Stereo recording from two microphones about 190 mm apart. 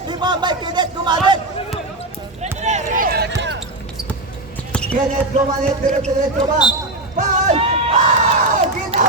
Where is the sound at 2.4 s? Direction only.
40° right (ahead or behind).